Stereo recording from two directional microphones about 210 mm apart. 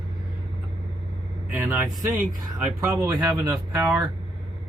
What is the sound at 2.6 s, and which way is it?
Speech, 10° right (ahead or behind).